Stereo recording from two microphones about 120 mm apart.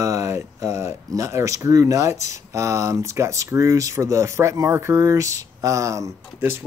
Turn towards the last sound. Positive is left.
turn(degrees=-20)  # may be behind; listen again after turning